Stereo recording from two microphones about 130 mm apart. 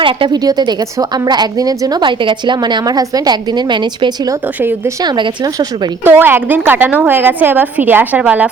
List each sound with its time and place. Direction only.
0.0 s a woman's voice: 35° right (ahead or behind)
6.1 s a woman's voice: 15° right (ahead or behind)